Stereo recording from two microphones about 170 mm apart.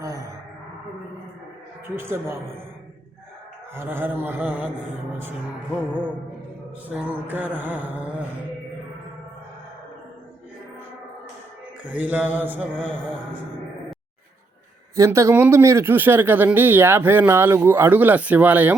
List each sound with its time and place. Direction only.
0.0 s a sound: 20° right (ahead or behind)
2.0 s speech: 15° right (ahead or behind)
3.8 s speech: 10° right (ahead or behind)
6.8 s speech: 10° right (ahead or behind)
11.9 s speech: 10° right (ahead or behind)
14.9 s speech: 15° right (ahead or behind)